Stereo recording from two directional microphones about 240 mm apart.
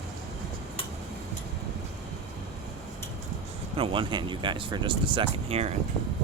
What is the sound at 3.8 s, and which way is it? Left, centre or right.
Speech, right.